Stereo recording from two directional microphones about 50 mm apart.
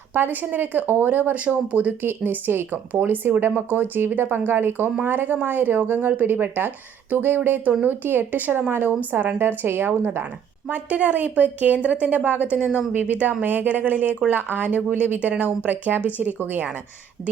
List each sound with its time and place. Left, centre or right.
0.1 s a woman's voice: right
1.3 s speech: right
2.0 s speech: right
2.9 s a woman's voice: right
10.7 s a woman's voice: right